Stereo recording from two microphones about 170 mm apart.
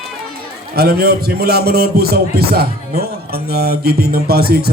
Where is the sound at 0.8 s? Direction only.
65° right (ahead or behind).